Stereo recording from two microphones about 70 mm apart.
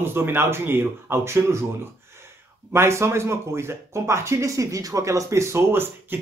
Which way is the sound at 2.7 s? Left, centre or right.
Right.